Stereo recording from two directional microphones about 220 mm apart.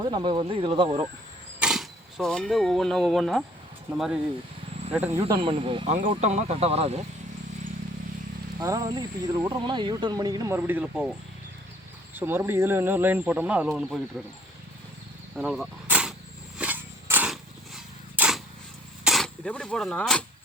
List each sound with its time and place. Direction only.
0.0 s speech: 20° right (ahead or behind)
1.5 s speech: 5° right (ahead or behind)
5.2 s speech: 20° right (ahead or behind)
8.6 s speech: 15° right (ahead or behind)
12.1 s speech: 10° right (ahead or behind)
15.4 s a sound: centre (ahead or behind)
19.0 s speech: centre (ahead or behind)